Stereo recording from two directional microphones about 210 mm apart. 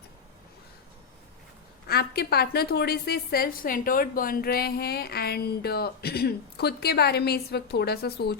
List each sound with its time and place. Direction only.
1.9 s a woman's voice: 50° left (ahead or behind)